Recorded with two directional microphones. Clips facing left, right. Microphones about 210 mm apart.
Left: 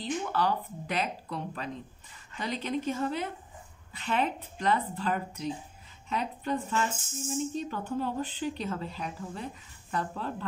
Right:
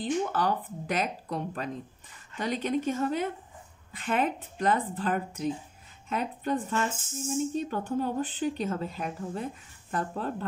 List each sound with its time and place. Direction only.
0.0 s speech: 45° right (ahead or behind)